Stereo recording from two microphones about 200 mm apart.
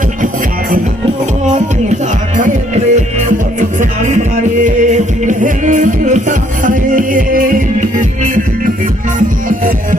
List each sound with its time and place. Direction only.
1.5 s music: 35° right (ahead or behind)